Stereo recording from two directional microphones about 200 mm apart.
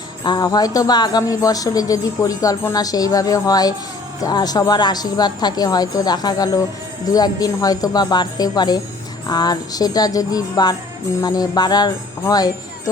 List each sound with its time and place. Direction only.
0.3 s a woman's voice: 20° left (ahead or behind)